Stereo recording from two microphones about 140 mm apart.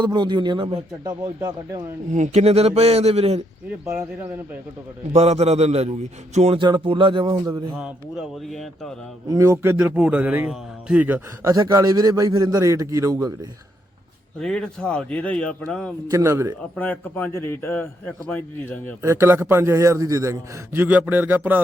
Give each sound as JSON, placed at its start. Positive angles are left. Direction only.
{"t": 0.0, "sound": "speech", "side_deg": -30}
{"t": 1.2, "sound": "a man's voice", "side_deg": -25}
{"t": 2.1, "sound": "a man's voice", "side_deg": -55}
{"t": 3.8, "sound": "a man's voice", "side_deg": -20}
{"t": 5.1, "sound": "a man's voice", "side_deg": -50}
{"t": 6.6, "sound": "speech", "side_deg": -35}
{"t": 7.8, "sound": "speech", "side_deg": -5}
{"t": 9.3, "sound": "a man's voice", "side_deg": -20}
{"t": 9.7, "sound": "a man's voice", "side_deg": -10}
{"t": 11.5, "sound": "a man's voice", "side_deg": -25}
{"t": 14.3, "sound": "a man's voice", "side_deg": 5}
{"t": 16.1, "sound": "a man's voice", "side_deg": -20}
{"t": 16.7, "sound": "a man's voice", "side_deg": 10}
{"t": 19.0, "sound": "a man's voice", "side_deg": -20}